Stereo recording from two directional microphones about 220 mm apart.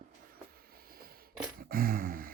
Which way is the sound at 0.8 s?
40° right (ahead or behind).